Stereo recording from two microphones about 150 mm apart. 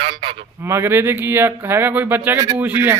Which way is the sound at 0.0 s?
35° right (ahead or behind).